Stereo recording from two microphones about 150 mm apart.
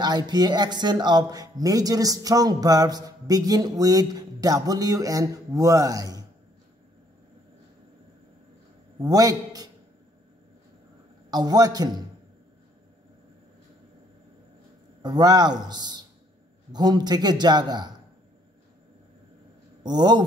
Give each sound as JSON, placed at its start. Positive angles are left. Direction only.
{"t": 0.0, "sound": "speech", "side_deg": -25}
{"t": 9.0, "sound": "speech", "side_deg": -25}
{"t": 11.2, "sound": "speech", "side_deg": -25}
{"t": 15.0, "sound": "speech", "side_deg": -25}
{"t": 19.8, "sound": "a man's voice", "side_deg": -30}